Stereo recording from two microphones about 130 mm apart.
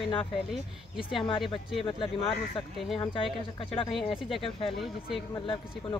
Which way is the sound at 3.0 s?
40° left (ahead or behind).